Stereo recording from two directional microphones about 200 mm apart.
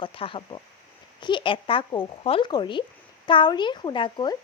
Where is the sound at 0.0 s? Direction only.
25° left (ahead or behind).